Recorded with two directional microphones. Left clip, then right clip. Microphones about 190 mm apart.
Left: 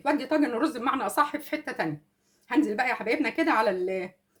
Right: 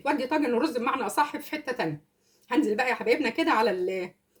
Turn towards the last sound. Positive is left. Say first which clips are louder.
# even
turn(degrees=30)  # may be behind; listen again after turning